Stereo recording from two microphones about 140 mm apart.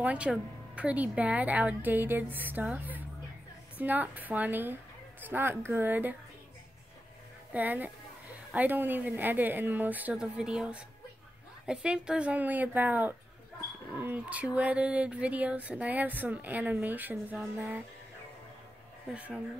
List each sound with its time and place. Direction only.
0.0 s speech: 10° right (ahead or behind)
7.5 s speech: 10° right (ahead or behind)
19.0 s speech: 10° right (ahead or behind)